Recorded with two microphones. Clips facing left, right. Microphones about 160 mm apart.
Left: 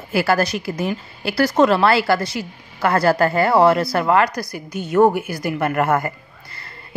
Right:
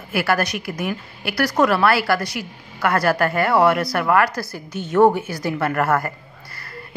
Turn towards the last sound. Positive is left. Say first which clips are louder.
# right 1 dB
turn(degrees=25)  # may be behind; listen again after turning